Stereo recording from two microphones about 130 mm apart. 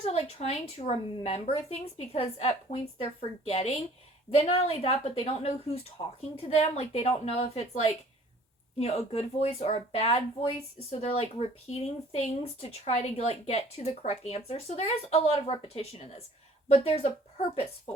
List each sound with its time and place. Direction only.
0.0 s speech: 55° left (ahead or behind)